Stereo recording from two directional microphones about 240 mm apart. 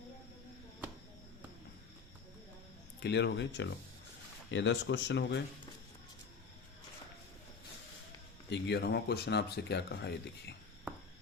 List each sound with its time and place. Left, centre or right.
3.0 s speech: left
8.4 s speech: left